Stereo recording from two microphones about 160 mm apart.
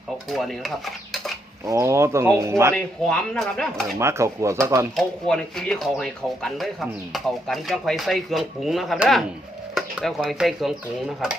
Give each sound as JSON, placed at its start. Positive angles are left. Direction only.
{"t": 0.3, "sound": "speech", "side_deg": 0}
{"t": 1.6, "sound": "speech", "side_deg": -20}
{"t": 2.7, "sound": "speech", "side_deg": 5}
{"t": 3.9, "sound": "speech", "side_deg": -20}
{"t": 4.9, "sound": "speech", "side_deg": 5}